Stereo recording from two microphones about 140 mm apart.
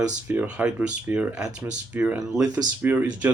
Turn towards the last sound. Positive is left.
turn(degrees=-10)  # may be behind; listen again after turning